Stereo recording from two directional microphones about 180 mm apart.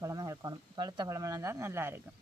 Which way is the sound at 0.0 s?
20° right (ahead or behind).